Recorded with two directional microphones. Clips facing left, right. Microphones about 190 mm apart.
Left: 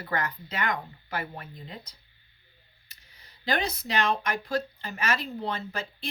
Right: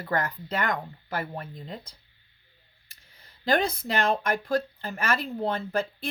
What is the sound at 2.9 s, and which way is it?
Speech, 50° right (ahead or behind).